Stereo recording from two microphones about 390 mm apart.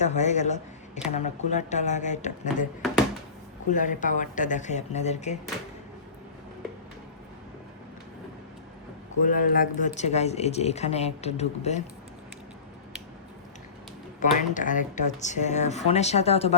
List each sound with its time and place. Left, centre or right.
0.0 s speech: centre
3.7 s speech: centre
9.2 s speech: left
14.2 s speech: centre